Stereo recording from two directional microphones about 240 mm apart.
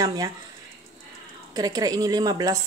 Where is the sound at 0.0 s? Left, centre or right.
Centre.